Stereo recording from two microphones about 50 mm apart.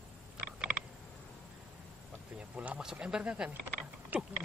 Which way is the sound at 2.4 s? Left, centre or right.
Right.